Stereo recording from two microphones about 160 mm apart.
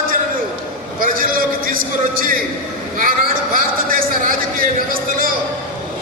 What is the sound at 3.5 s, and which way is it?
A man's voice, 60° right (ahead or behind).